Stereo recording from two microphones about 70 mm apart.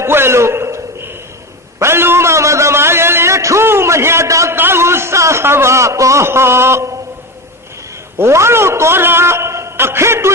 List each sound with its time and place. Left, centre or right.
0.0 s a sound: right
4.5 s a man's voice: right
8.2 s a man's voice: right